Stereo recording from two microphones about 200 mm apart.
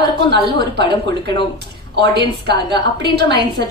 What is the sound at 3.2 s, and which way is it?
Speech, 55° right (ahead or behind).